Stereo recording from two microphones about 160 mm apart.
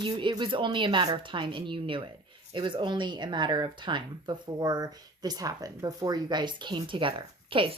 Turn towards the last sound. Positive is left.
turn(degrees=-35)  # may be behind; listen again after turning